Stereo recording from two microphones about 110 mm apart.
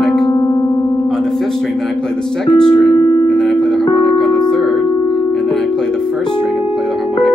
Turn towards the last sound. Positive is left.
turn(degrees=5)  # may be behind; listen again after turning